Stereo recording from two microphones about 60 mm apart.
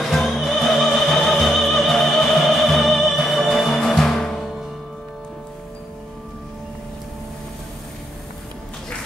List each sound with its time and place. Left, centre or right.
0.0 s music: centre